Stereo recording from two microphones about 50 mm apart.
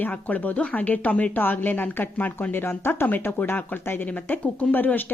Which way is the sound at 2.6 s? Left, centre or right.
Left.